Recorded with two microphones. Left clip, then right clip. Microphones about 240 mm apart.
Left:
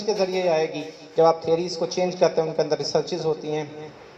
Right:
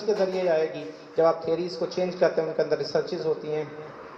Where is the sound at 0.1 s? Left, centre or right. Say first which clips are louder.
Left 2 dB; left.